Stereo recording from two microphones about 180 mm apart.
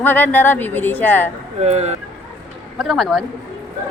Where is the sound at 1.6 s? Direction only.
40° right (ahead or behind).